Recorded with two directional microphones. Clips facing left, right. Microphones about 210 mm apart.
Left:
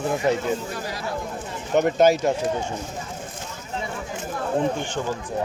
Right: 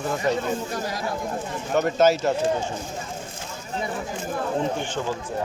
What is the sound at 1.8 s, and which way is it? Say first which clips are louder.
Speech: left 2 dB; 15° left (ahead or behind).